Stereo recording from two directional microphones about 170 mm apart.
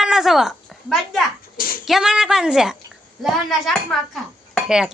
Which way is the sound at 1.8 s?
5° right (ahead or behind).